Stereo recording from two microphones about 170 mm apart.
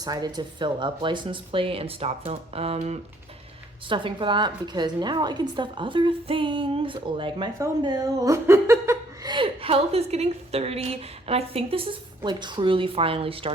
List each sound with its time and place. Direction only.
0.0 s speech: 25° right (ahead or behind); by 3.0 s 40° right (ahead or behind)
3.8 s a woman's voice: 30° right (ahead or behind)